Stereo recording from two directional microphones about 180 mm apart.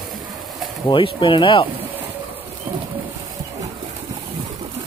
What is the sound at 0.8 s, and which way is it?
Speech, 30° left (ahead or behind).